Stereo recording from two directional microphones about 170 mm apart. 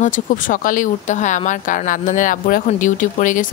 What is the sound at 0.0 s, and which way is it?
Speech, 50° left (ahead or behind).